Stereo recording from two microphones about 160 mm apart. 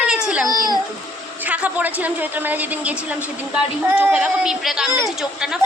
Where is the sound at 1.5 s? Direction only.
10° right (ahead or behind).